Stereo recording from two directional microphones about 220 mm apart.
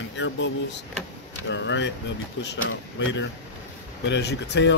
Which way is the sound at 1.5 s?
55° left (ahead or behind).